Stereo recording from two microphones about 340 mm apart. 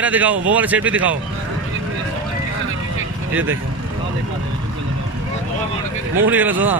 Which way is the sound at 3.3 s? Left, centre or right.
Right.